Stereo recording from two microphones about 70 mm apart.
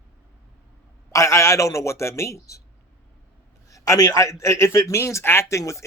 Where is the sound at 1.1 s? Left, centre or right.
Left.